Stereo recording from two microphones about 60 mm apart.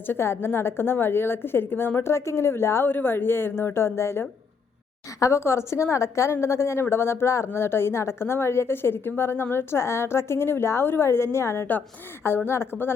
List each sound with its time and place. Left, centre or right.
0.0 s a woman's voice: left
2.9 s a woman's voice: left